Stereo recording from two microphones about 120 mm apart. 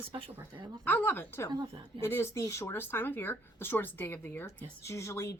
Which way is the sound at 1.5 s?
40° right (ahead or behind).